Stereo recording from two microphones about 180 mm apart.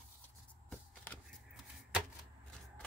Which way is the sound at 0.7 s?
5° left (ahead or behind).